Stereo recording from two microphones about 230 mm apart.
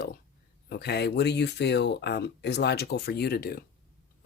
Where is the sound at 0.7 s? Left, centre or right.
Left.